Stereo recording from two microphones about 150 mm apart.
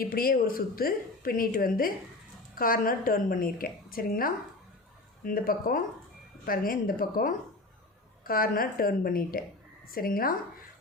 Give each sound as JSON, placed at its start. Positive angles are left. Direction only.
{"t": 0.0, "sound": "a woman's voice", "side_deg": 75}